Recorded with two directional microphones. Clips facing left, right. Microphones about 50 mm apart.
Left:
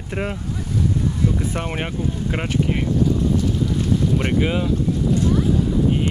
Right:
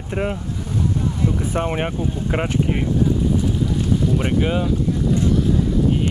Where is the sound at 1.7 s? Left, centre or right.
Centre.